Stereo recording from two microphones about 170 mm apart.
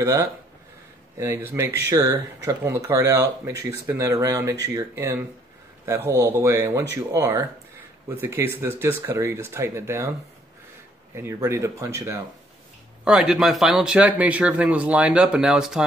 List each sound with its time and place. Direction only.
0.0 s speech: 15° right (ahead or behind)
11.1 s speech: 15° right (ahead or behind)
13.0 s speech: 5° right (ahead or behind)